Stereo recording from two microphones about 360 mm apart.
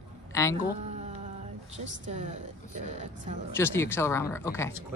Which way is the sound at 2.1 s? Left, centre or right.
Centre.